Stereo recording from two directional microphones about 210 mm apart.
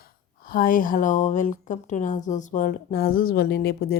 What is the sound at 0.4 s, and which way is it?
A woman's voice, 45° left (ahead or behind).